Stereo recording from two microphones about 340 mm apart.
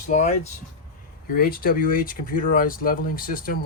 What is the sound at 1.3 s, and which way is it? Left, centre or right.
Speech, left.